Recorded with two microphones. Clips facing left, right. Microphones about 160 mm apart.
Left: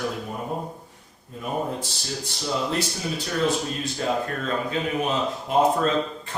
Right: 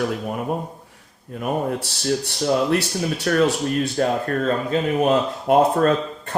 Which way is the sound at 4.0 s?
55° right (ahead or behind).